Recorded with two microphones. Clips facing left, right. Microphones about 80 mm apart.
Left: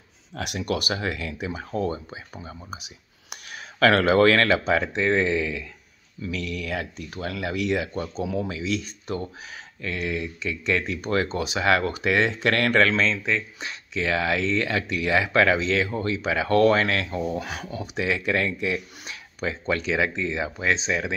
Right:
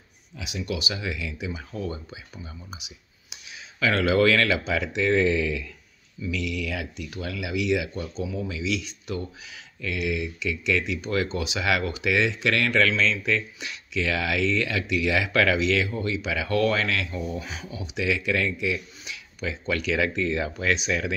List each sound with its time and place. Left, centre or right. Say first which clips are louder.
0.3 s speech: left 4 dB; left
6.2 s speech: right 1 dB; left
8.2 s speech: left 3 dB; left
8.5 s speech: left 1 dB; left
17.4 s speech: left 4 dB; left